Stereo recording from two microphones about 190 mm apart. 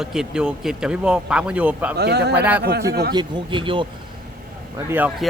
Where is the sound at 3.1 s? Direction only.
25° right (ahead or behind).